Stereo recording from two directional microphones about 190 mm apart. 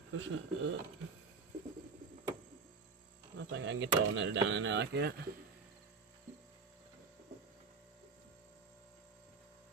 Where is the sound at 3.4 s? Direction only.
75° right (ahead or behind).